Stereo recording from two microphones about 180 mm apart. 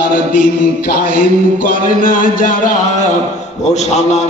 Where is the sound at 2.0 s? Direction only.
50° left (ahead or behind).